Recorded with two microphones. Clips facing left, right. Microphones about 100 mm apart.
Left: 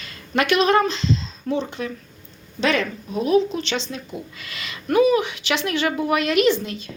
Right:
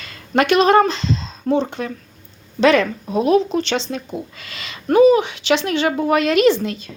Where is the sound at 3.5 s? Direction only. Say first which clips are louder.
Right 6 dB; 40° right (ahead or behind).